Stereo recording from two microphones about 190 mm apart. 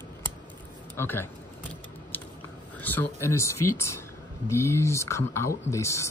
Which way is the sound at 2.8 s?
10° left (ahead or behind).